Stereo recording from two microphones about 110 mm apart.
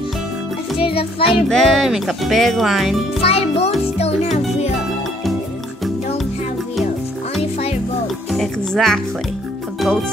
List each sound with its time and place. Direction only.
0.7 s a child's voice: 55° left (ahead or behind)
1.3 s speech: centre (ahead or behind)
3.2 s a child's voice: 65° left (ahead or behind)
4.0 s music: 75° left (ahead or behind)
8.3 s speech: centre (ahead or behind)
9.8 s music: centre (ahead or behind)